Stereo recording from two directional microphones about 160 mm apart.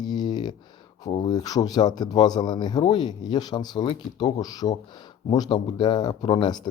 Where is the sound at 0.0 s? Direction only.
25° left (ahead or behind).